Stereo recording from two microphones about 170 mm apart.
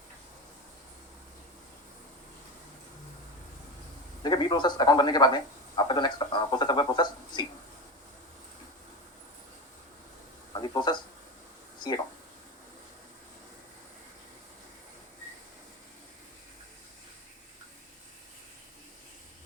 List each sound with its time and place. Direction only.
4.2 s a man's voice: 25° left (ahead or behind)
10.5 s speech: 25° left (ahead or behind)